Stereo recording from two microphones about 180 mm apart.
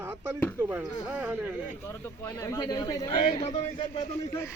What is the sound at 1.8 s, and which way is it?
A man's voice, 10° left (ahead or behind).